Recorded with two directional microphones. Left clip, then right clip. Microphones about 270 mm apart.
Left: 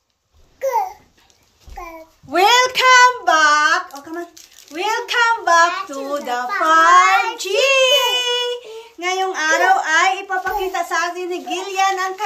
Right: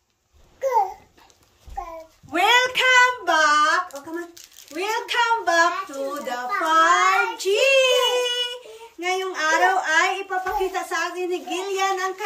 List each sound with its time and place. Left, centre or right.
2.3 s child singing: centre
4.7 s a child's voice: centre
9.0 s a sound: centre
10.7 s a child's voice: centre